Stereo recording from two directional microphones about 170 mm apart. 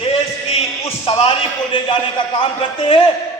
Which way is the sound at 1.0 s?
30° left (ahead or behind).